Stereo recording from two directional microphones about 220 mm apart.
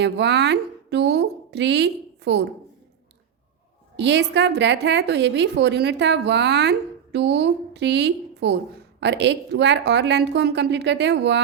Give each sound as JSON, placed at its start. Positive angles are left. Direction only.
{"t": 0.0, "sound": "a woman's voice", "side_deg": -50}
{"t": 3.9, "sound": "a woman's voice", "side_deg": -50}